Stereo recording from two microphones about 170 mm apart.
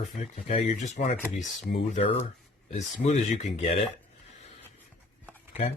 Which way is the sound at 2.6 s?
40° left (ahead or behind).